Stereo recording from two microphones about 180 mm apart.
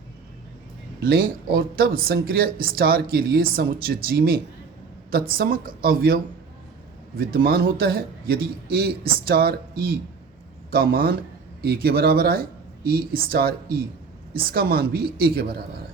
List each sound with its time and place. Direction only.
0.9 s speech: 60° right (ahead or behind)
7.2 s speech: 55° right (ahead or behind)